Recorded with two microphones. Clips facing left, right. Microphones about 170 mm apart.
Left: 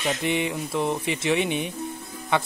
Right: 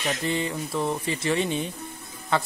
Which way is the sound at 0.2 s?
15° left (ahead or behind).